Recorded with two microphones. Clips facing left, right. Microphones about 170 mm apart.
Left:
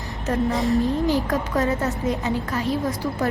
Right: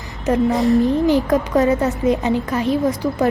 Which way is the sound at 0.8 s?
20° right (ahead or behind).